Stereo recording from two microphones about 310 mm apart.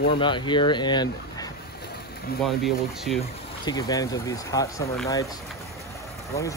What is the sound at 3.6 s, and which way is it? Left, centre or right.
Speech, centre.